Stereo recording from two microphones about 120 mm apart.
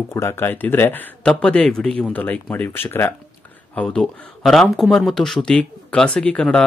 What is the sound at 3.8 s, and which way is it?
Speech, 5° left (ahead or behind).